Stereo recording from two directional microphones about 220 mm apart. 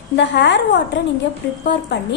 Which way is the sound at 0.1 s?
50° left (ahead or behind).